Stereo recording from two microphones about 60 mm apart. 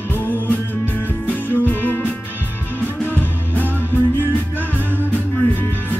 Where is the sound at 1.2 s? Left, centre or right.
Left.